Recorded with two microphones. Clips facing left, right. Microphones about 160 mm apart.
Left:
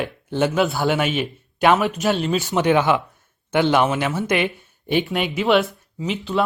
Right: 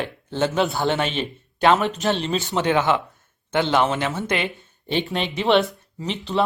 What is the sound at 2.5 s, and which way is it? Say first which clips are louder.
Speech: left 2 dB; 15° left (ahead or behind).